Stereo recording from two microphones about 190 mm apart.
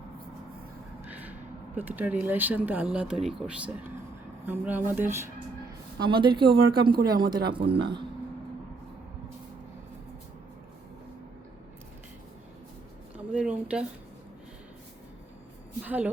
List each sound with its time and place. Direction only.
1.0 s speech: 10° right (ahead or behind)
6.1 s speech: 25° right (ahead or behind)
13.1 s speech: 5° right (ahead or behind)
15.8 s speech: 5° right (ahead or behind)